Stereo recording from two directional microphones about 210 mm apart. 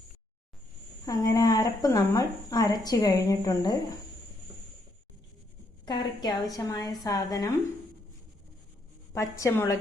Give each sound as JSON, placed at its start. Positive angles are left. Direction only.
{"t": 1.0, "sound": "a woman's voice", "side_deg": 15}
{"t": 5.8, "sound": "a woman's voice", "side_deg": 20}
{"t": 9.1, "sound": "a woman's voice", "side_deg": 15}